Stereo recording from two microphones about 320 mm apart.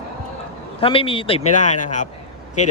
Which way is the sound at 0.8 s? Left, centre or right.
Centre.